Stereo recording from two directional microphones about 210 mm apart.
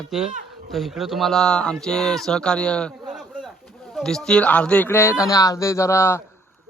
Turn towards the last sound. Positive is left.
turn(degrees=10)  # may be behind; listen again after turning